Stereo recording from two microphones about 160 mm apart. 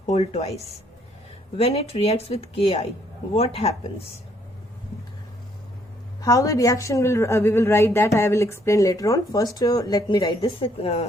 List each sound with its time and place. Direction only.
0.0 s a woman's voice: 45° left (ahead or behind)
6.2 s a woman's voice: 20° left (ahead or behind)
10.4 s a woman's voice: 40° left (ahead or behind)